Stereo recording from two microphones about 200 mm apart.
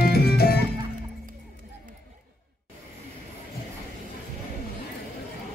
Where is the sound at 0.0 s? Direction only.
50° left (ahead or behind).